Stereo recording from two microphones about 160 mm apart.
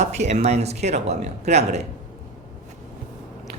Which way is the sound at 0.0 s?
45° right (ahead or behind).